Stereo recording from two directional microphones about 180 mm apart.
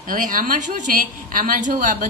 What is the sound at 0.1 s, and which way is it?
A woman's voice, 50° right (ahead or behind).